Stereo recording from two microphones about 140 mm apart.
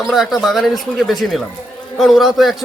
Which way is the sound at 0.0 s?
Centre (ahead or behind).